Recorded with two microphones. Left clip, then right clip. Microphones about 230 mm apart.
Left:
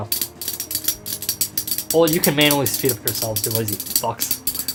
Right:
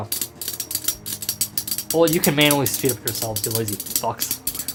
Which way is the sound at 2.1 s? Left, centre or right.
Centre.